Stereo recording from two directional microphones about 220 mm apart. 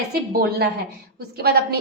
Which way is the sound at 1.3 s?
45° right (ahead or behind).